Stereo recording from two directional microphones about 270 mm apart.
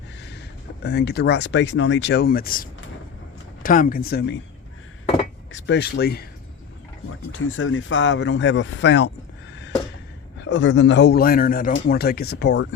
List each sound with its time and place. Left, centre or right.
0.8 s a man's voice: left
5.5 s a man's voice: left
7.3 s speech: left
10.4 s a man's voice: left